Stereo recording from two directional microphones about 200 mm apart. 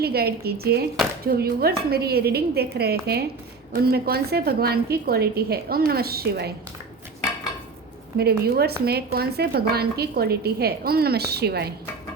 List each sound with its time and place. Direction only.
0.0 s a woman's voice: 50° right (ahead or behind)
8.2 s a woman's voice: 50° right (ahead or behind)